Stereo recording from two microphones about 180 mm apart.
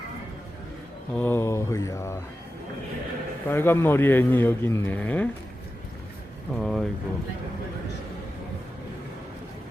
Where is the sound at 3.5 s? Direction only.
10° left (ahead or behind).